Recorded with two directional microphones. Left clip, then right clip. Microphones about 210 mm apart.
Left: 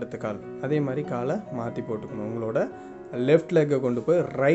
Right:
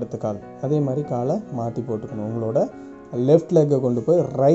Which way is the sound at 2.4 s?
20° left (ahead or behind).